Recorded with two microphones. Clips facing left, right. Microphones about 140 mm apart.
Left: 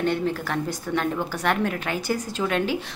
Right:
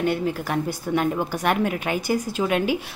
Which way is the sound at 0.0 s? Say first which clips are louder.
Right 1 dB; 10° right (ahead or behind).